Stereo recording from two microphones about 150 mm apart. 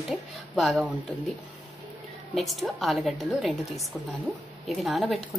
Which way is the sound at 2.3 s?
Centre (ahead or behind).